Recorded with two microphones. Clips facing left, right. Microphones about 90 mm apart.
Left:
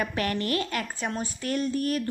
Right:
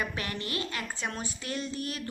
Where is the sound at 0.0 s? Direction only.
45° left (ahead or behind).